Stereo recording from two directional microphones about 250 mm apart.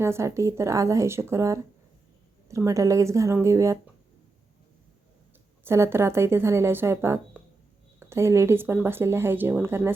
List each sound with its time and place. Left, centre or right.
0.0 s speech: centre
5.6 s speech: centre